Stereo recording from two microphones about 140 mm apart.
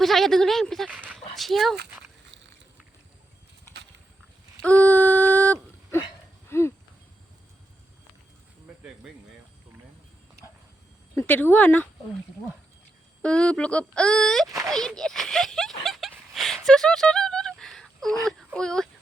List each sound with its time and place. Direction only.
0.0 s speech: centre (ahead or behind)
0.9 s dog: 10° right (ahead or behind)
1.4 s speech: centre (ahead or behind)
4.6 s a sound: 10° left (ahead or behind)
11.1 s speech: 15° left (ahead or behind)
13.2 s speech: 5° left (ahead or behind)
16.6 s a sound: 5° left (ahead or behind)